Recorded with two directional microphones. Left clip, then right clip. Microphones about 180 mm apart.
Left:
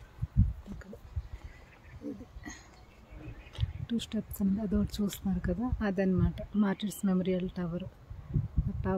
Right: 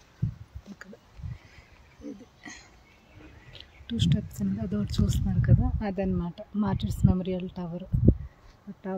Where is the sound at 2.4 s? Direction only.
5° right (ahead or behind).